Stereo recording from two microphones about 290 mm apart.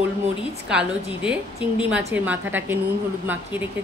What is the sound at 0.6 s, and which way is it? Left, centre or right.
Speech, centre.